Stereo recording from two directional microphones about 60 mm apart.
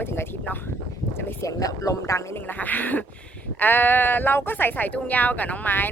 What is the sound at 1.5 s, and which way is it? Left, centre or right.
Speech, left.